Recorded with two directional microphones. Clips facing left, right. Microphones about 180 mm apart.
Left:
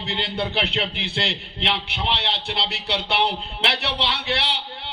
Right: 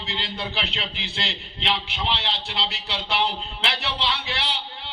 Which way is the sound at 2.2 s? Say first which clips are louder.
Left 2 dB; 65° left (ahead or behind).